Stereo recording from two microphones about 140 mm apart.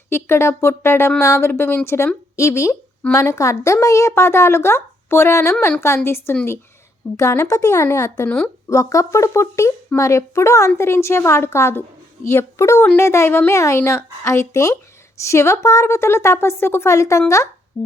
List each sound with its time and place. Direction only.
0.1 s speech: 20° left (ahead or behind)